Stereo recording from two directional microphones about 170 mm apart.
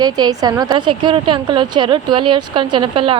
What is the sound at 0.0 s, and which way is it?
A woman's voice, 25° right (ahead or behind).